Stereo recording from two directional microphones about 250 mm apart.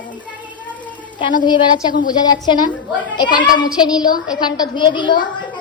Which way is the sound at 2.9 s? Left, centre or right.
Centre.